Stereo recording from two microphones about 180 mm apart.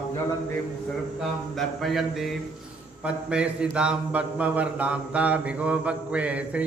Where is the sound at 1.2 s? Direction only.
Centre (ahead or behind).